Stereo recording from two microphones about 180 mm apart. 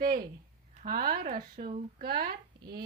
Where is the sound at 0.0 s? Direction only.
55° right (ahead or behind).